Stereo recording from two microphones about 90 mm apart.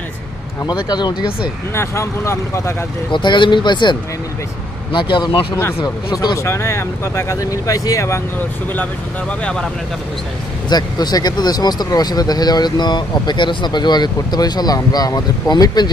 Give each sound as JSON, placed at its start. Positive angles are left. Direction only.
{"t": 0.7, "sound": "speech", "side_deg": 50}
{"t": 1.8, "sound": "speech", "side_deg": 30}
{"t": 3.1, "sound": "speech", "side_deg": 65}
{"t": 5.6, "sound": "speech", "side_deg": 30}
{"t": 9.4, "sound": "speech", "side_deg": 10}
{"t": 10.7, "sound": "speech", "side_deg": 50}